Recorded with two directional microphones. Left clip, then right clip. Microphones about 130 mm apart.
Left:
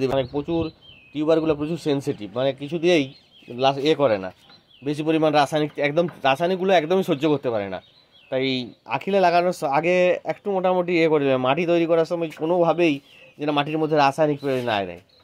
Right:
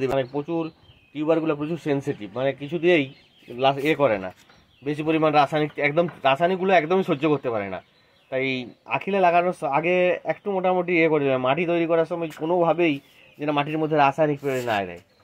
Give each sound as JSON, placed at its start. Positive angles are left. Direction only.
{"t": 0.2, "sound": "a man's voice", "side_deg": 35}